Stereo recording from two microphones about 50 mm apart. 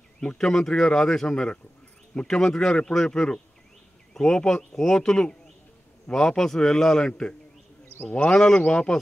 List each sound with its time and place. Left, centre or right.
0.2 s speech: centre
4.1 s a sound: centre
4.4 s speech: centre